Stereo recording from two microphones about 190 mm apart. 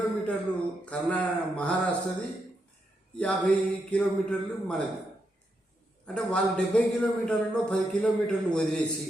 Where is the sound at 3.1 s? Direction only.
5° left (ahead or behind).